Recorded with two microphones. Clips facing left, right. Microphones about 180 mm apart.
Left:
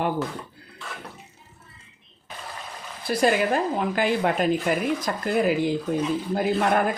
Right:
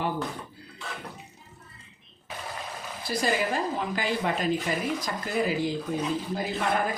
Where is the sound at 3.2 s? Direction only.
55° left (ahead or behind).